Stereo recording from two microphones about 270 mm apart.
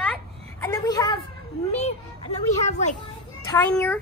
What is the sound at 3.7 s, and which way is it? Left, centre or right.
Speech, centre.